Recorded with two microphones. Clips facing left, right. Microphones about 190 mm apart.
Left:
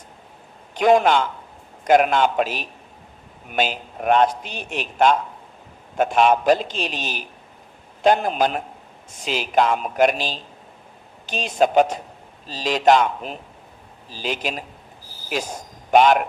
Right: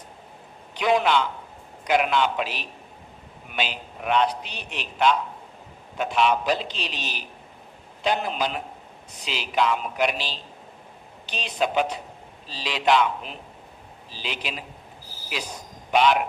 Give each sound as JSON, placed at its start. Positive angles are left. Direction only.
{"t": 0.7, "sound": "a man's voice", "side_deg": 45}